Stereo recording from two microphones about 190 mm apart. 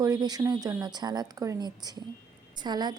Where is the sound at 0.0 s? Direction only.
20° right (ahead or behind).